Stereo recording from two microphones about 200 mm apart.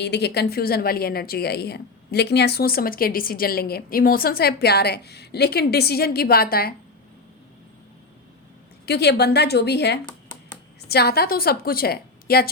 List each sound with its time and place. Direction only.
0.0 s a woman's voice: 55° left (ahead or behind)
8.9 s a woman's voice: 55° left (ahead or behind)